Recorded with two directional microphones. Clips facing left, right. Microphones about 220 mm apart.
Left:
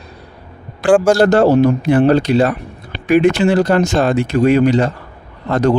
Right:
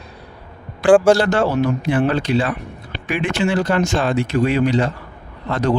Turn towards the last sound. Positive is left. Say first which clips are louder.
# left 5 dB
turn(degrees=45)  # may be behind; listen again after turning